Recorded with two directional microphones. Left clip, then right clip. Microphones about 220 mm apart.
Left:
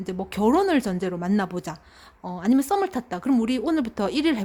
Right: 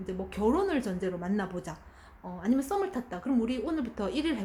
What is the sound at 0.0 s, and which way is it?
Speech, 45° left (ahead or behind).